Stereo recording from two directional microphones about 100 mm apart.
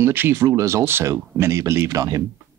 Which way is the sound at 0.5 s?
35° right (ahead or behind).